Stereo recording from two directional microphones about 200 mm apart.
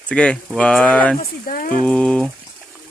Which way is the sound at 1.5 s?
45° left (ahead or behind).